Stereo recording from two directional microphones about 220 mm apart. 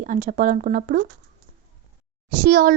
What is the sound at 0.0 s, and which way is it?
A woman's voice, 35° right (ahead or behind).